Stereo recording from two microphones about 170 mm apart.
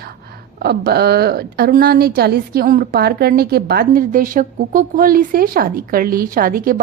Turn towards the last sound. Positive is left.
turn(degrees=-55)  # may be behind; listen again after turning